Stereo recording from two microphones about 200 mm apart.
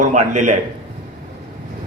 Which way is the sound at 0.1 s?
35° right (ahead or behind).